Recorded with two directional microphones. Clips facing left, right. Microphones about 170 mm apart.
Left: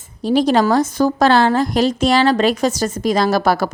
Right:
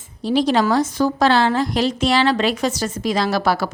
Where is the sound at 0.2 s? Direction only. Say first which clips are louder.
Left 3 dB; 45° left (ahead or behind).